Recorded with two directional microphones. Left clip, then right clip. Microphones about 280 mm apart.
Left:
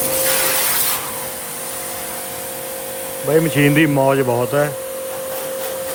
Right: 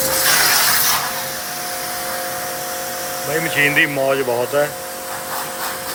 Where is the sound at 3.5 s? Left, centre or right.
Centre.